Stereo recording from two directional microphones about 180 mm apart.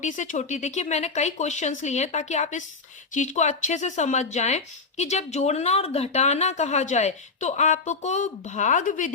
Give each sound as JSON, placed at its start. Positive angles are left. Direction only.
{"t": 0.0, "sound": "speech", "side_deg": 40}